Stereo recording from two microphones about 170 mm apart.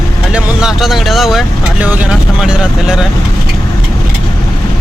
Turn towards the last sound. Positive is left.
turn(degrees=-5)  # may be behind; listen again after turning